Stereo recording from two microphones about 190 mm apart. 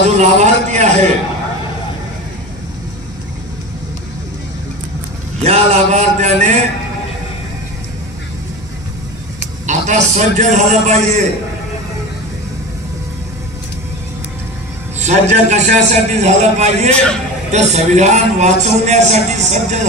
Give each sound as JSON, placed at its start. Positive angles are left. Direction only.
{"t": 0.0, "sound": "a sound", "side_deg": -35}
{"t": 5.4, "sound": "a man's voice", "side_deg": -35}
{"t": 9.7, "sound": "a man's voice", "side_deg": -40}
{"t": 15.0, "sound": "a man's voice", "side_deg": -35}